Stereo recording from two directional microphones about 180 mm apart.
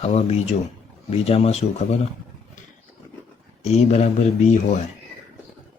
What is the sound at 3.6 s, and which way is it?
Speech, 40° left (ahead or behind).